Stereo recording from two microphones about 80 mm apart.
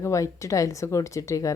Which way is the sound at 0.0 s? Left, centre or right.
Left.